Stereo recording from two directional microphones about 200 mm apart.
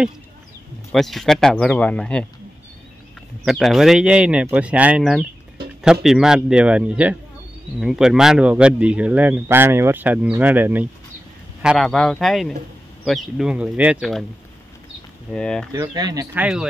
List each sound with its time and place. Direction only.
0.9 s speech: centre (ahead or behind)
3.4 s speech: centre (ahead or behind)
15.3 s speech: 5° left (ahead or behind)
15.7 s speech: 20° right (ahead or behind)
16.3 s speech: 5° right (ahead or behind)